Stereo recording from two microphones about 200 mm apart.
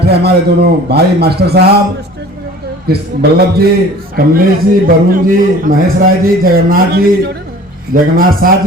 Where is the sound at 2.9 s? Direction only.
50° right (ahead or behind).